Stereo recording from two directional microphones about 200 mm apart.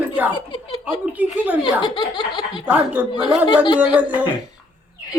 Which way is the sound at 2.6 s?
10° right (ahead or behind).